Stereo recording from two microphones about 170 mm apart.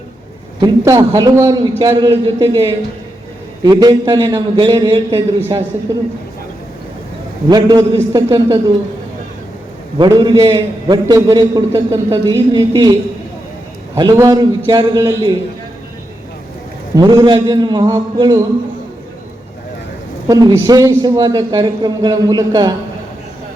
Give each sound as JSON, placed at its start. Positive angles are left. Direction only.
{"t": 0.6, "sound": "a man's voice", "side_deg": -25}
{"t": 7.5, "sound": "a man's voice", "side_deg": -20}
{"t": 10.0, "sound": "a man's voice", "side_deg": -25}
{"t": 17.0, "sound": "a man's voice", "side_deg": -25}
{"t": 20.2, "sound": "a man's voice", "side_deg": -20}